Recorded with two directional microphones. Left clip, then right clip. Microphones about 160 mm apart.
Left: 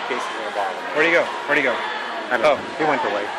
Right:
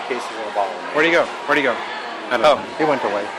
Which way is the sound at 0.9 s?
40° right (ahead or behind).